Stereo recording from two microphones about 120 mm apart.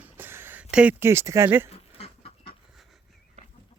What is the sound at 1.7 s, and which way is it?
Livestock, 55° left (ahead or behind).